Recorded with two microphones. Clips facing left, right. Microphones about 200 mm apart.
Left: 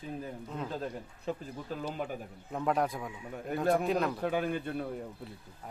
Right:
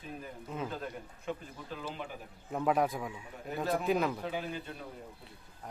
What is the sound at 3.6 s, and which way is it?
Speech, 55° left (ahead or behind).